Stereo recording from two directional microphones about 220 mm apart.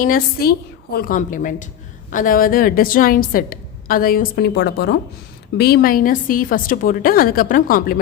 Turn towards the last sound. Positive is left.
turn(degrees=40)  # may be behind; listen again after turning